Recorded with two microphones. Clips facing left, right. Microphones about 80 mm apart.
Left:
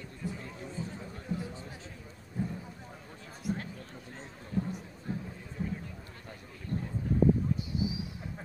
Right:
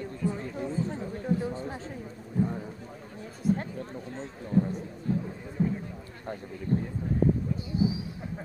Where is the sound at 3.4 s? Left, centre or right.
Right.